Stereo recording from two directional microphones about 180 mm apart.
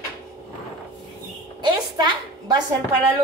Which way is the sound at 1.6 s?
25° right (ahead or behind).